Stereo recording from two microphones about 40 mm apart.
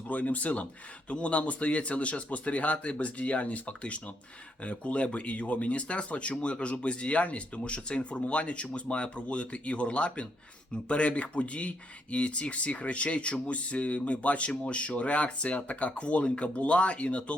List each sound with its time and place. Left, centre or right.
0.1 s speech: left